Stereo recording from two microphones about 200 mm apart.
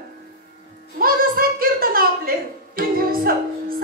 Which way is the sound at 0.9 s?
45° right (ahead or behind).